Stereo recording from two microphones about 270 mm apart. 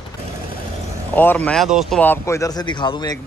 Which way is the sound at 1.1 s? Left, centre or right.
Centre.